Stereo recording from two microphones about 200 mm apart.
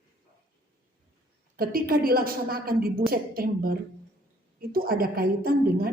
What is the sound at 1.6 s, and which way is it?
A woman's voice, 45° right (ahead or behind).